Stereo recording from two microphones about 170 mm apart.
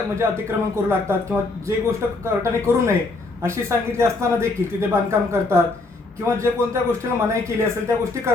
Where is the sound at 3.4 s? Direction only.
15° right (ahead or behind).